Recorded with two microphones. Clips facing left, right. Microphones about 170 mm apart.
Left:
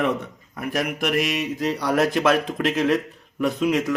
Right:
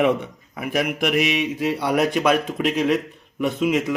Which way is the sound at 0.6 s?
5° right (ahead or behind).